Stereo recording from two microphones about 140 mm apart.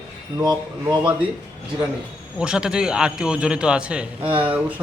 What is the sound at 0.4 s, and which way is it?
Speech, 30° right (ahead or behind).